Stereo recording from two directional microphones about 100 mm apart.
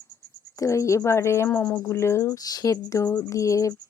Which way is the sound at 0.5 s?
30° left (ahead or behind).